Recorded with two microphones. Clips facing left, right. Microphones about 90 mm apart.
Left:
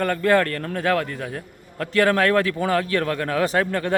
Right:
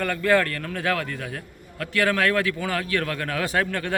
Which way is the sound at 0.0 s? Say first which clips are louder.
Left 2 dB; 35° left (ahead or behind).